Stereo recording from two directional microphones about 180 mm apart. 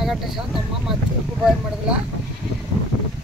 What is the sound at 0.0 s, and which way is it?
Speech, centre (ahead or behind).